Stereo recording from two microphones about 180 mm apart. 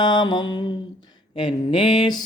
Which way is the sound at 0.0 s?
25° left (ahead or behind).